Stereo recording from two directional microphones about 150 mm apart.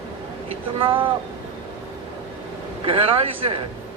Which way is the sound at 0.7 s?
35° right (ahead or behind).